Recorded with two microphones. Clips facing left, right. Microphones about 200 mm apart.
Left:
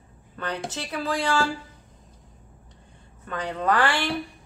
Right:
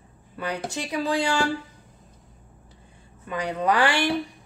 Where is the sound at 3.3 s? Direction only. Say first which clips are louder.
Right 1 dB; 10° right (ahead or behind).